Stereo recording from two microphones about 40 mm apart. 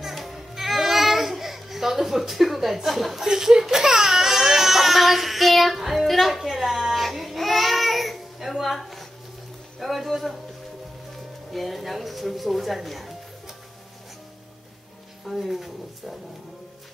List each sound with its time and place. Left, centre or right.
0.0 s music: centre
3.3 s baby cry: centre
9.8 s speech: centre
11.5 s speech: centre
15.3 s speech: centre